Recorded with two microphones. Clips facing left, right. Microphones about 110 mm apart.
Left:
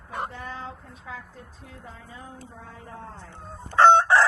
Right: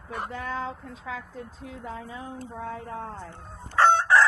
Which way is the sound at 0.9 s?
90° right.